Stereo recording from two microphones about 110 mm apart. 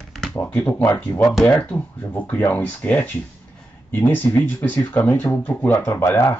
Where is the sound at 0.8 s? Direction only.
25° left (ahead or behind).